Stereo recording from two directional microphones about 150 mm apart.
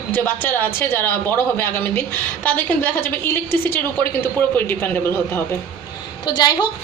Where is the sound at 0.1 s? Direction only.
15° left (ahead or behind).